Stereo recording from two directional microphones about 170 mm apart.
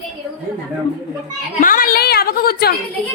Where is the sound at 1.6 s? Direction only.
55° left (ahead or behind).